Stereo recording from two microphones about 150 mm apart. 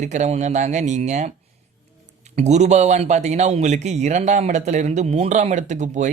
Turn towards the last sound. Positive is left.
turn(degrees=-55)  # may be behind; listen again after turning